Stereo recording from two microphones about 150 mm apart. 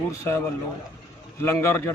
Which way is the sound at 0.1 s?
15° left (ahead or behind).